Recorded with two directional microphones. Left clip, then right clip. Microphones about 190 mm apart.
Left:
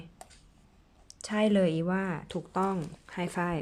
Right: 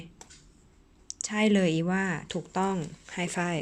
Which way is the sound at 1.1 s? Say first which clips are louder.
Right 1 dB; 10° left (ahead or behind).